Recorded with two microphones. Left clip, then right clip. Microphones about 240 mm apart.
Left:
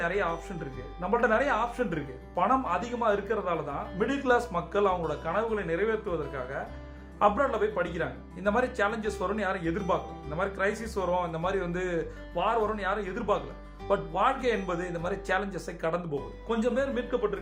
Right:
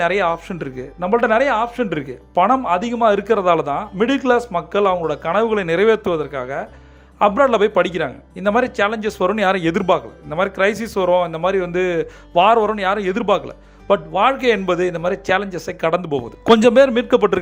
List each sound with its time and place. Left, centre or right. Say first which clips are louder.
0.0 s speech: right 12 dB; right